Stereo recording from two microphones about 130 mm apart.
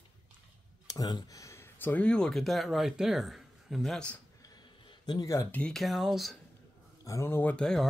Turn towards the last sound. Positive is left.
turn(degrees=5)  # may be behind; listen again after turning